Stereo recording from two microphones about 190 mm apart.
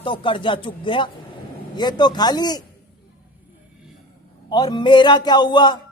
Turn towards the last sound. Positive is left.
turn(degrees=25)  # may be behind; listen again after turning